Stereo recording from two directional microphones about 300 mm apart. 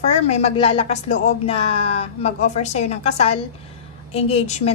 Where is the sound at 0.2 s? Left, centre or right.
Left.